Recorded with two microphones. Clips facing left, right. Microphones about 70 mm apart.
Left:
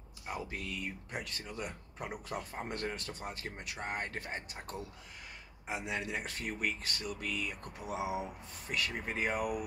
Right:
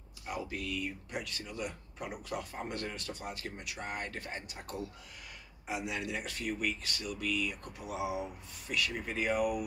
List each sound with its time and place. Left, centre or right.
0.3 s speech: left